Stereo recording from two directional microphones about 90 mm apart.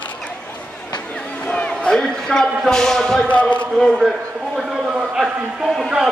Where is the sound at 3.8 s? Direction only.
5° right (ahead or behind).